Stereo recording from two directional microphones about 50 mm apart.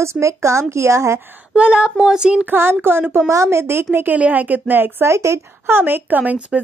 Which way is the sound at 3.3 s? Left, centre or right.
Right.